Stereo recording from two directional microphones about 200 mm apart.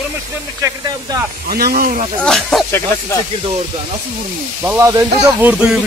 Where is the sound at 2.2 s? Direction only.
5° left (ahead or behind).